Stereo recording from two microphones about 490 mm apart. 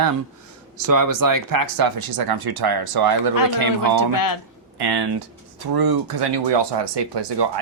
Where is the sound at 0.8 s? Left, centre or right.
Right.